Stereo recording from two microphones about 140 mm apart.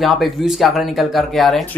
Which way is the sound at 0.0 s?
Centre (ahead or behind).